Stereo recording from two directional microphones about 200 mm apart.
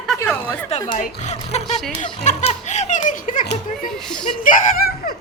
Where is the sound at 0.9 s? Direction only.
40° left (ahead or behind).